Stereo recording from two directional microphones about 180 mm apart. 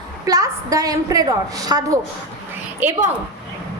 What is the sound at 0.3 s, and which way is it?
A woman's voice, 20° right (ahead or behind).